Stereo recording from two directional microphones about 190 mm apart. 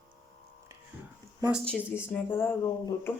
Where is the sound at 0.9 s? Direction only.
10° right (ahead or behind).